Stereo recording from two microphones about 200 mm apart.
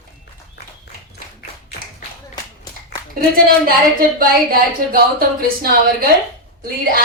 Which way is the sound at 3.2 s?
45° right (ahead or behind).